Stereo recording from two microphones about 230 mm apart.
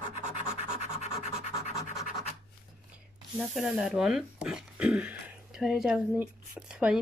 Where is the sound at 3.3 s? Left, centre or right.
Centre.